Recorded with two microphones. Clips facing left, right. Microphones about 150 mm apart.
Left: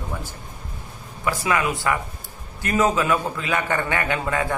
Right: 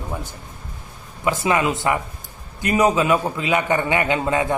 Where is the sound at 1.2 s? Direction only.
20° right (ahead or behind).